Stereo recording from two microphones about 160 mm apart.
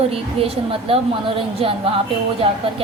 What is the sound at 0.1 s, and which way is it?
A woman's voice, 35° right (ahead or behind).